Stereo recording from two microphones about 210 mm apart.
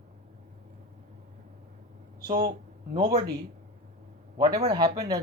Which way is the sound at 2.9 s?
20° right (ahead or behind).